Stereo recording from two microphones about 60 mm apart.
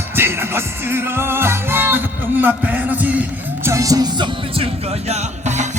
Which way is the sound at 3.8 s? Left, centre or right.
Right.